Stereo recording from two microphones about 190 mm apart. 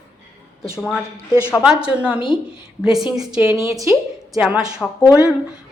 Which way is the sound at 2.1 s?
25° left (ahead or behind).